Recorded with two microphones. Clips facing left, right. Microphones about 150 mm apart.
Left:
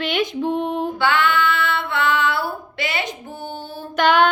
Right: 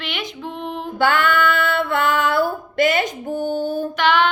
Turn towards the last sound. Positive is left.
turn(degrees=45)  # may be behind; listen again after turning